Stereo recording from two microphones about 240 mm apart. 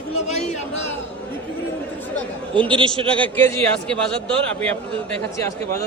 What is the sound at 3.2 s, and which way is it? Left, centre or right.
A man's voice, centre.